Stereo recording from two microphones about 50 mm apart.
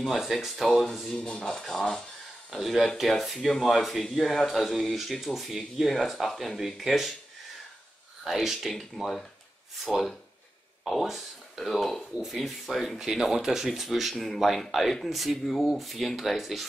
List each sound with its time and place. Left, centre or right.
0.0 s speech: centre
1.0 s speech: centre
2.5 s speech: centre
3.3 s speech: centre
3.6 s speech: centre
8.2 s speech: centre